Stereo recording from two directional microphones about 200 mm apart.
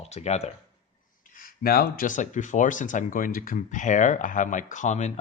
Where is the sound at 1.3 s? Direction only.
45° left (ahead or behind).